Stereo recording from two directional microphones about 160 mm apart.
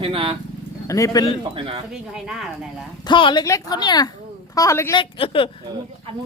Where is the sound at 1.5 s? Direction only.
35° right (ahead or behind).